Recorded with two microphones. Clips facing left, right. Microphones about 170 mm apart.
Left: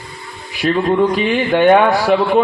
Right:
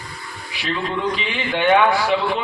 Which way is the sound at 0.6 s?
50° left (ahead or behind).